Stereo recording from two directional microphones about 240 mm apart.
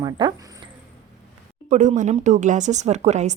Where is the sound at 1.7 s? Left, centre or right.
Right.